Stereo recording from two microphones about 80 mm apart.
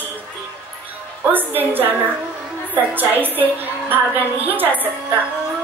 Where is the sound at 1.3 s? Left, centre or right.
Right.